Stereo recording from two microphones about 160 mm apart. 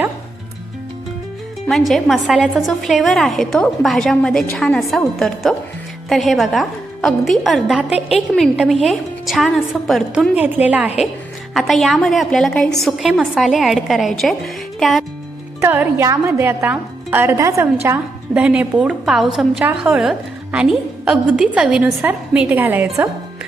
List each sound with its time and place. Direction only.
1.6 s a woman's voice: centre (ahead or behind)
10.3 s a woman's voice: 10° right (ahead or behind)
15.6 s a woman's voice: 15° right (ahead or behind)